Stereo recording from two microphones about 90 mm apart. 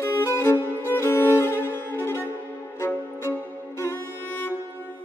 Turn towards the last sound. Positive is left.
turn(degrees=30)  # may be behind; listen again after turning